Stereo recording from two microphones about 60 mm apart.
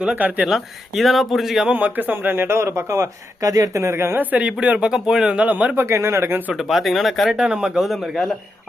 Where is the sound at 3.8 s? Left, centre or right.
Right.